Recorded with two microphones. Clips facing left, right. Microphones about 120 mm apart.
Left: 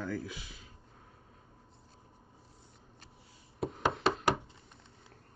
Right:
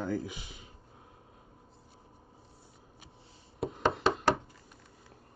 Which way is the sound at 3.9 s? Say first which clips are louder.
Right 2 dB; centre (ahead or behind).